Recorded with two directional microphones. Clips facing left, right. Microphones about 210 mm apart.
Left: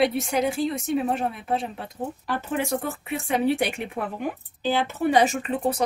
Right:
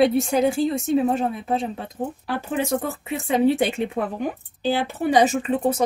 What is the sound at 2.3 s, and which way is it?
Speech, 10° right (ahead or behind).